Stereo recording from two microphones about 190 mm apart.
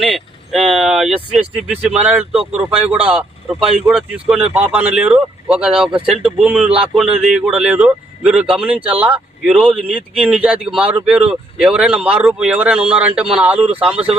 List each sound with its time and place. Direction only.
0.0 s a man's voice: centre (ahead or behind)
13.9 s speech: 30° right (ahead or behind)